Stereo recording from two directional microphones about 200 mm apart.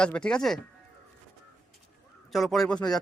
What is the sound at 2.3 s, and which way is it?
Speech, centre (ahead or behind).